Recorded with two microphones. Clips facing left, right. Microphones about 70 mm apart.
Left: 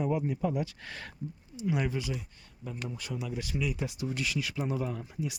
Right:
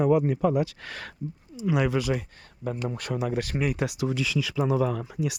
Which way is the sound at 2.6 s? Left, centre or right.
Right.